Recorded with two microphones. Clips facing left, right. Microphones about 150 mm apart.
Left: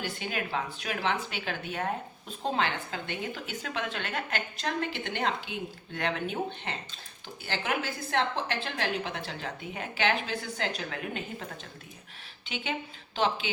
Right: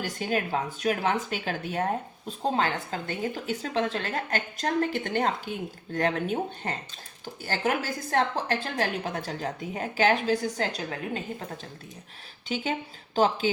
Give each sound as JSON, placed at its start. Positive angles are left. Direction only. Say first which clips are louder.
{"t": 0.0, "sound": "speech", "louder": "right 5 dB", "side_deg": -40}